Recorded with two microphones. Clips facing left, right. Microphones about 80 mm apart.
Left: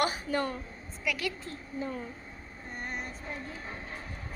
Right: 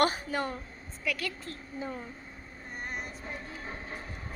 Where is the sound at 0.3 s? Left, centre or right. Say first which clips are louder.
Left 2 dB; centre.